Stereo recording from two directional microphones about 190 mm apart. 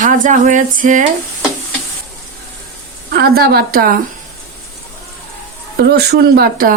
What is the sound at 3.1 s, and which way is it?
Speech, 55° right (ahead or behind).